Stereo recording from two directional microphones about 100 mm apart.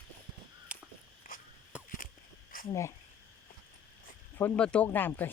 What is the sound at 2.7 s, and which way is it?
Speech, 30° left (ahead or behind).